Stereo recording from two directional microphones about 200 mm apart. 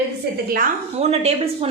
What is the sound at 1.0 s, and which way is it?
Speech, 30° right (ahead or behind).